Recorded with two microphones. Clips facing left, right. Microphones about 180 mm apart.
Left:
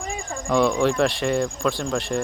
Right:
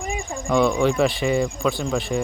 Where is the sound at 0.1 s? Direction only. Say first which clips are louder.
Right 1 dB; centre (ahead or behind).